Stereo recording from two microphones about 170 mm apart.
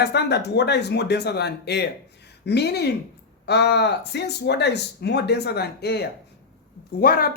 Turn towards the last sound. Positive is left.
turn(degrees=60)  # may be behind; listen again after turning